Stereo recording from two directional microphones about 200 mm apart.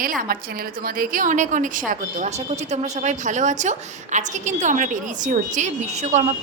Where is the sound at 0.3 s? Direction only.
45° right (ahead or behind).